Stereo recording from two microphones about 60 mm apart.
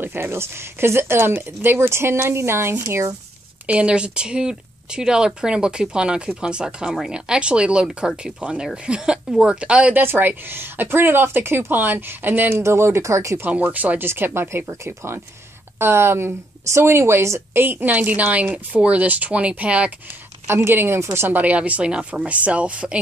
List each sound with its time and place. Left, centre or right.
0.0 s speech: right
3.6 s a woman's voice: centre
9.9 s a woman's voice: right
13.5 s speech: right
13.9 s a woman's voice: right
15.8 s speech: right
17.6 s speech: right
20.4 s a woman's voice: right
21.4 s speech: right